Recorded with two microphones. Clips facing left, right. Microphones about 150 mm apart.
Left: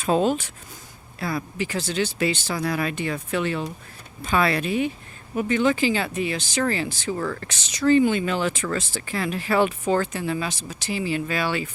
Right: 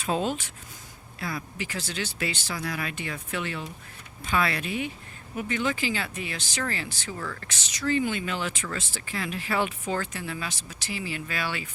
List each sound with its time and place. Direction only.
0.0 s speech: 45° left (ahead or behind)
1.5 s speech: 30° left (ahead or behind)
7.1 s speech: 40° left (ahead or behind)
7.4 s speech: 25° left (ahead or behind)